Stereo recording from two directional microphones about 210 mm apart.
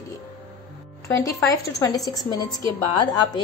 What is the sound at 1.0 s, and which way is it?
A woman's voice, 15° left (ahead or behind).